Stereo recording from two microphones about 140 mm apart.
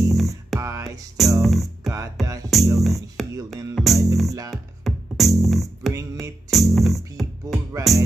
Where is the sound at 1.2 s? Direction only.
Centre (ahead or behind).